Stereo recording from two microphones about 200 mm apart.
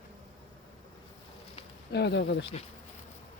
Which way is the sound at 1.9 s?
55° left (ahead or behind).